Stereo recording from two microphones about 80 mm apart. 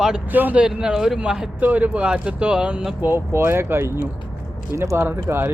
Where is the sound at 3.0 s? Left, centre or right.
Right.